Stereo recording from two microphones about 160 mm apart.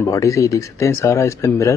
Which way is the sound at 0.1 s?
20° left (ahead or behind).